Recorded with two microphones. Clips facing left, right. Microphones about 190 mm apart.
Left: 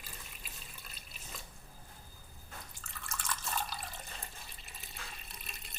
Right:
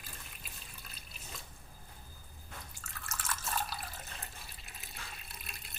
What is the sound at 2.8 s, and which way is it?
Water, centre (ahead or behind).